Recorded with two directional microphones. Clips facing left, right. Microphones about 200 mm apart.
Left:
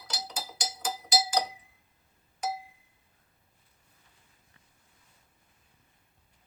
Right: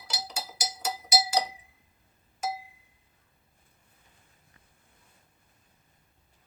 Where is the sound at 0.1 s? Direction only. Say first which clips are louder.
Right 1 dB; 5° right (ahead or behind).